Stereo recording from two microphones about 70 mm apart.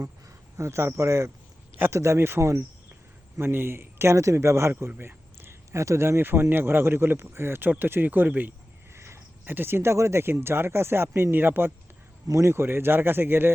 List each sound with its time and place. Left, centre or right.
0.5 s speech: right
2.4 s speech: right
3.3 s speech: right
4.7 s speech: right
9.0 s speech: right
12.3 s speech: right